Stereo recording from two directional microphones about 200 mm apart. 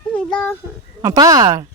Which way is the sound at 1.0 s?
15° right (ahead or behind).